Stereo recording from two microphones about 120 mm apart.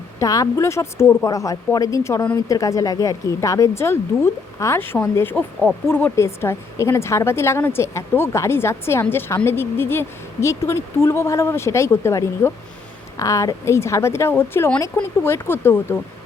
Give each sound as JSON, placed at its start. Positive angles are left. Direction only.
{"t": 0.2, "sound": "a woman's voice", "side_deg": 30}